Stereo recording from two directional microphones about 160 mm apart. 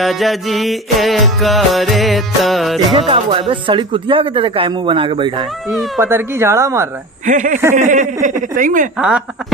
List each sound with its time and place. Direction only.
0.0 s music: centre (ahead or behind)
3.0 s speech: 35° right (ahead or behind)
5.9 s speech: 15° right (ahead or behind)
7.2 s speech: 55° right (ahead or behind)
8.9 s music: 5° right (ahead or behind)